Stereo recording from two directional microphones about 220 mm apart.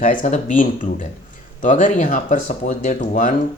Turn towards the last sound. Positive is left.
turn(degrees=35)  # may be behind; listen again after turning